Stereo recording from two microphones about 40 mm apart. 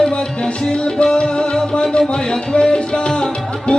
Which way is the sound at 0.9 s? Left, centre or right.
Left.